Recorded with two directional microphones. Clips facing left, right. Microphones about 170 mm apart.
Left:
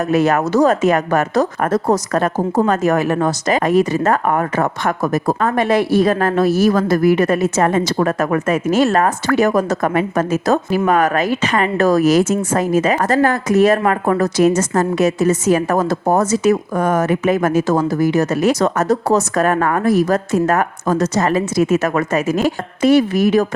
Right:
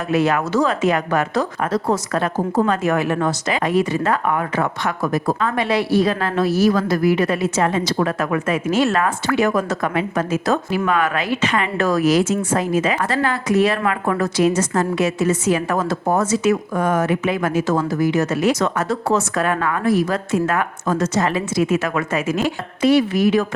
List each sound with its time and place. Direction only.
0.1 s speech: 45° left (ahead or behind)